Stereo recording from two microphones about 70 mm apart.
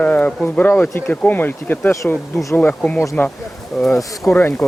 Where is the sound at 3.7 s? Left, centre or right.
Centre.